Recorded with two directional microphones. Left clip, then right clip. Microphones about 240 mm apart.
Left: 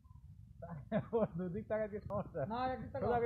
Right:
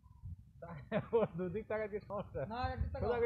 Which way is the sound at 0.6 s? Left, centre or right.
Right.